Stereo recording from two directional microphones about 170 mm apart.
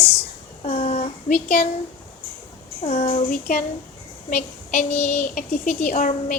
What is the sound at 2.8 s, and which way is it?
A woman's voice, 45° left (ahead or behind).